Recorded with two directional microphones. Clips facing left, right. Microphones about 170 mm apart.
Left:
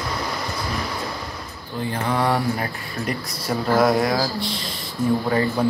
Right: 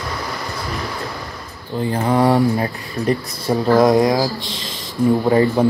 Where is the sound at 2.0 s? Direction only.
25° right (ahead or behind).